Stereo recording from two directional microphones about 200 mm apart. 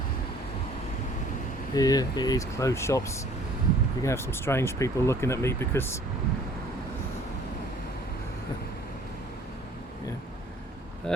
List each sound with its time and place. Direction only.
1.7 s speech: 20° left (ahead or behind)